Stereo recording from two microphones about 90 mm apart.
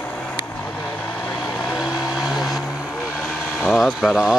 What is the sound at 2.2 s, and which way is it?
Vehicle, centre (ahead or behind).